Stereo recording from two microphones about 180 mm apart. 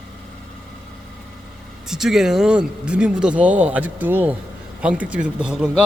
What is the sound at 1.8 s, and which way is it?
Speech, 5° right (ahead or behind).